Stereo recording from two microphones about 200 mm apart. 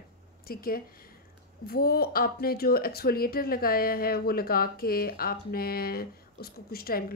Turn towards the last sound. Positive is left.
turn(degrees=50)  # may be behind; listen again after turning